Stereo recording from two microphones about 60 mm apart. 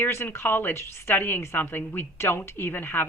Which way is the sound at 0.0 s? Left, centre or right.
Left.